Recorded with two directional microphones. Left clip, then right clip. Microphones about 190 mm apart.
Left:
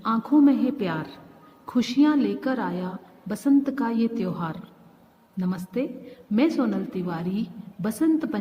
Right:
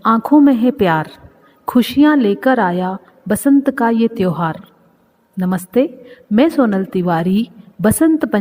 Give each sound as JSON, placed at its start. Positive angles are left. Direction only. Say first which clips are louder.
{"t": 0.0, "sound": "a woman's voice", "louder": "right 9 dB", "side_deg": -45}